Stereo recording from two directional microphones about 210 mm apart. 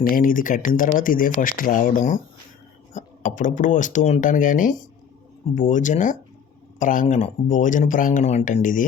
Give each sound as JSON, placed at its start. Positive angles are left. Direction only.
{"t": 0.0, "sound": "speech", "side_deg": 40}